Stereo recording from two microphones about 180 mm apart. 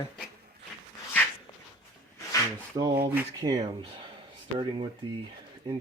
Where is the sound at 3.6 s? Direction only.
30° right (ahead or behind).